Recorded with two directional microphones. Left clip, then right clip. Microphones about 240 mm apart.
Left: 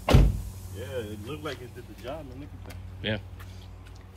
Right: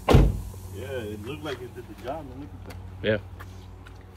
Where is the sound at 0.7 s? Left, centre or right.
Centre.